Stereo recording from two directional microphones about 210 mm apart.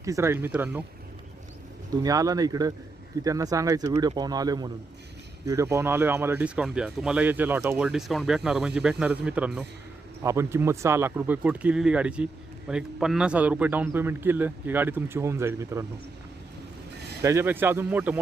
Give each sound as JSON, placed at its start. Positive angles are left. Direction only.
{"t": 0.0, "sound": "speech", "side_deg": -15}
{"t": 2.0, "sound": "speech", "side_deg": -15}
{"t": 17.2, "sound": "speech", "side_deg": -10}